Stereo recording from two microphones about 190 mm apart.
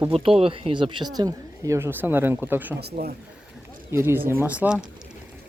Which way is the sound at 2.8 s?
55° right (ahead or behind).